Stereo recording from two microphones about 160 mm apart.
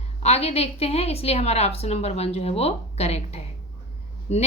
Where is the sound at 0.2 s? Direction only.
40° left (ahead or behind).